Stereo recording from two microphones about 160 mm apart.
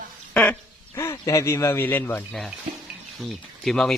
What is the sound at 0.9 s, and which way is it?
Speech, 20° left (ahead or behind).